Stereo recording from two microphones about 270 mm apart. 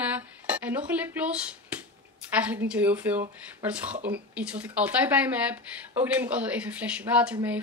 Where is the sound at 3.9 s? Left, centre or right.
Right.